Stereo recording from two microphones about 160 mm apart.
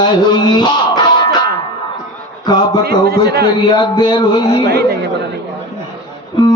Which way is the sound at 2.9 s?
80° right.